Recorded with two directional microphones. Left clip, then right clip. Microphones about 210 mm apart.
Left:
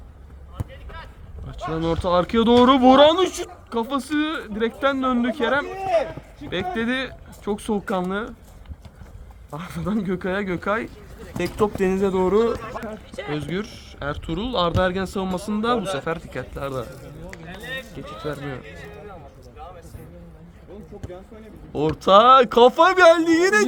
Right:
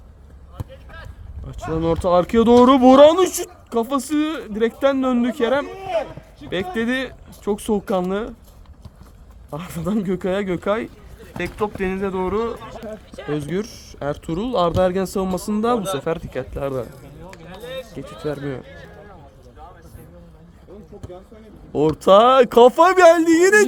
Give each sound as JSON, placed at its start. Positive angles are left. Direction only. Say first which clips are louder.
{"t": 1.5, "sound": "speech", "louder": "right 3 dB", "side_deg": -55}
{"t": 6.7, "sound": "speech", "louder": "right 2 dB", "side_deg": -45}
{"t": 9.5, "sound": "speech", "louder": "right 3 dB", "side_deg": -45}
{"t": 11.3, "sound": "speech", "louder": "left 2 dB", "side_deg": 5}
{"t": 13.4, "sound": "speech", "louder": "right 3 dB", "side_deg": -60}
{"t": 21.7, "sound": "speech", "louder": "right 3 dB", "side_deg": -55}